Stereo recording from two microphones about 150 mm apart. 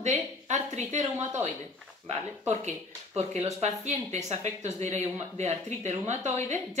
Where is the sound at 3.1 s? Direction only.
45° right (ahead or behind).